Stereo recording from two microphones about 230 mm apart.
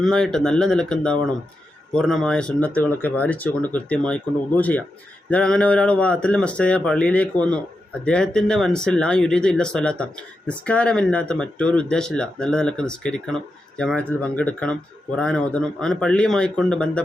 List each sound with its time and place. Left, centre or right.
0.0 s speech: centre